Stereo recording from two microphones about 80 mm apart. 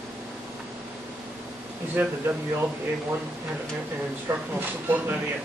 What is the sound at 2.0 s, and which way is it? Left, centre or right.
Speech, right.